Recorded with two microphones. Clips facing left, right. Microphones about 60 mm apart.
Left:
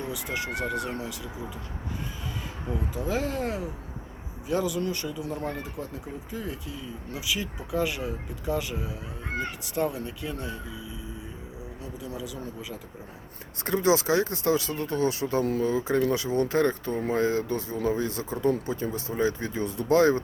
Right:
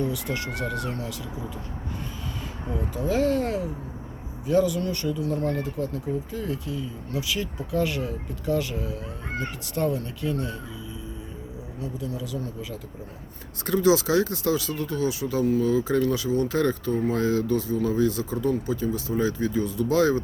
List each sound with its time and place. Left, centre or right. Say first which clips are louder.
0.0 s speech: right 4 dB; centre
2.9 s speech: right 7 dB; centre
11.8 s speech: right 5 dB; centre
13.7 s speech: right 2 dB; left